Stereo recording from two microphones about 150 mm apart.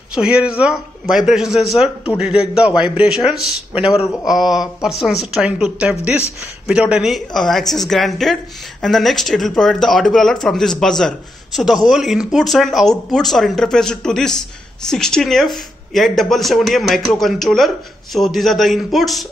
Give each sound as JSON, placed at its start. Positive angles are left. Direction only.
{"t": 0.1, "sound": "speech", "side_deg": -5}